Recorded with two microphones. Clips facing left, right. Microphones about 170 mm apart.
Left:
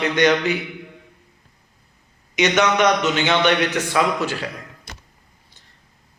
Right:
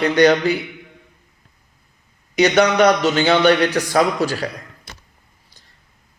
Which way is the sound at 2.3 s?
35° right (ahead or behind).